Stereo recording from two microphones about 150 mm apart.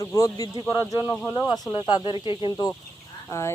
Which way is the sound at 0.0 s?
25° left (ahead or behind).